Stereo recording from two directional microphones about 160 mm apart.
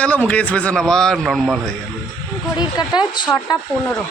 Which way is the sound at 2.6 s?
25° left (ahead or behind).